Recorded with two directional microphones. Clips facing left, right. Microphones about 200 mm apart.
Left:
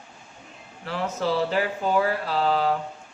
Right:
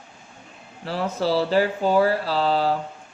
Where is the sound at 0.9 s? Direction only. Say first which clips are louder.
Right 3 dB; 30° right (ahead or behind).